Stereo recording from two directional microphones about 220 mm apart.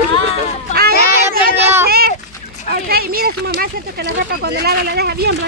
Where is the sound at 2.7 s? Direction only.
45° right (ahead or behind).